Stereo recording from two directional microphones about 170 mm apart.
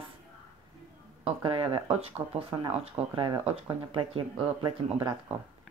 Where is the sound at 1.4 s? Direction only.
30° right (ahead or behind).